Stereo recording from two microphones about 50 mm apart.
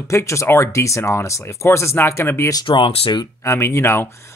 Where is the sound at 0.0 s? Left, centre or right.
Left.